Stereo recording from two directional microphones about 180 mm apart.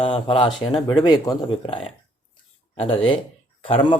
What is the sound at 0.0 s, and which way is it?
Speech, 30° left (ahead or behind).